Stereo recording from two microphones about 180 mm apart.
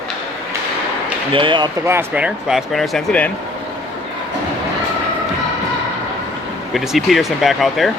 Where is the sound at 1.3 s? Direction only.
30° right (ahead or behind).